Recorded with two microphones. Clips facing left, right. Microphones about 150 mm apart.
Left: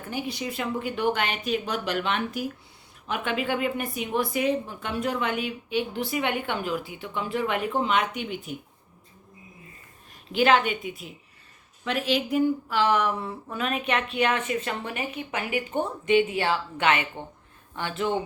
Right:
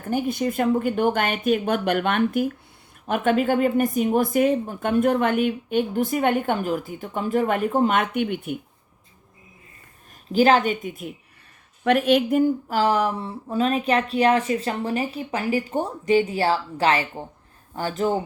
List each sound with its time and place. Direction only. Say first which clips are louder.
0.1 s speech: right 8 dB; 50° right (ahead or behind)
10.3 s speech: right 4 dB; 40° right (ahead or behind)